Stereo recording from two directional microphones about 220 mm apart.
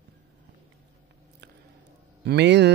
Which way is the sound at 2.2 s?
50° right (ahead or behind).